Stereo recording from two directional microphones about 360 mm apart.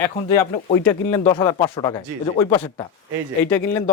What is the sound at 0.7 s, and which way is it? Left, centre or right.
Speech, centre.